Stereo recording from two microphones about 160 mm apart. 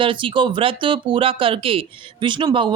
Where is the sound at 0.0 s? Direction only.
30° right (ahead or behind).